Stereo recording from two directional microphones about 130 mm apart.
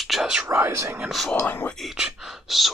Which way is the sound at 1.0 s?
Centre (ahead or behind).